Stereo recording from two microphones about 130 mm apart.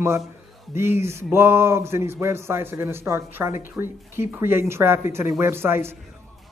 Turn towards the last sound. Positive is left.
turn(degrees=-20)  # may be behind; listen again after turning